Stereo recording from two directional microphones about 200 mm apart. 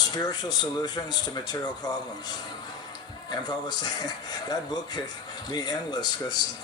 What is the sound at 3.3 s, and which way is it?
Speech, 20° left (ahead or behind).